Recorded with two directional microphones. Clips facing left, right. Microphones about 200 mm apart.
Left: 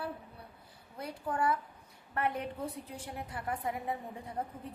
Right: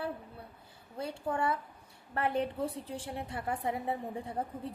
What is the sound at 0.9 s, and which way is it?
A woman's voice, 30° right (ahead or behind).